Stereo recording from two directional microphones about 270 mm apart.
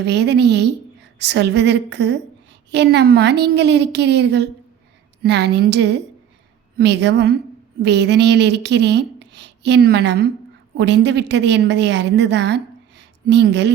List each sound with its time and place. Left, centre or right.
0.0 s a woman's voice: right